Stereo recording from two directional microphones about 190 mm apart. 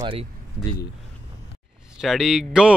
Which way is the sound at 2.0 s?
Centre (ahead or behind).